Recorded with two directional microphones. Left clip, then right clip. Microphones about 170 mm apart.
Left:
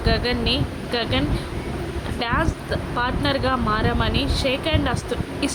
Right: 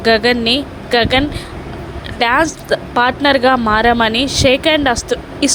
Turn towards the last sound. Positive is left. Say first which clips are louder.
# right 9 dB
turn(degrees=-40)  # may be behind; listen again after turning